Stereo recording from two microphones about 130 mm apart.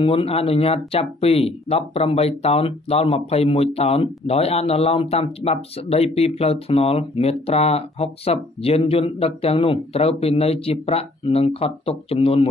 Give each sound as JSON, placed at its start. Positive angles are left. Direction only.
{"t": 0.0, "sound": "speech", "side_deg": 45}